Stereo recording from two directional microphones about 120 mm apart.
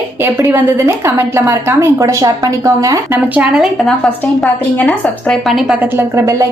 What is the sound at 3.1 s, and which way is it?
Speech, 10° right (ahead or behind).